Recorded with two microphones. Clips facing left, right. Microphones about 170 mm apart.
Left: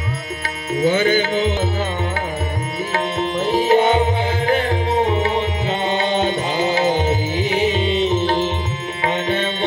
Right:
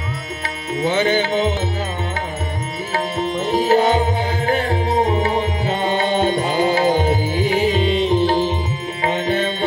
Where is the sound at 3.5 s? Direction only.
35° right (ahead or behind).